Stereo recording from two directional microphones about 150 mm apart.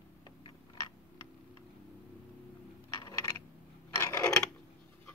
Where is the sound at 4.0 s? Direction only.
15° left (ahead or behind).